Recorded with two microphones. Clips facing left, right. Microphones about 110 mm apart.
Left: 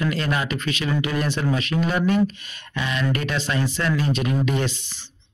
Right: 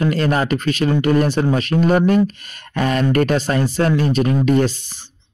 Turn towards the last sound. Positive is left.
turn(degrees=-45)  # may be behind; listen again after turning